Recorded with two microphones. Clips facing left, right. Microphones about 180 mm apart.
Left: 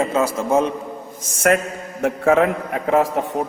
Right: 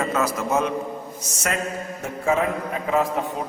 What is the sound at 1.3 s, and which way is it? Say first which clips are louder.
A man's voice: left 9 dB; 55° left (ahead or behind).